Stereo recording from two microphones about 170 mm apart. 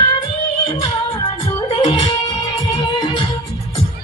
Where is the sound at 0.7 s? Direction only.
20° left (ahead or behind).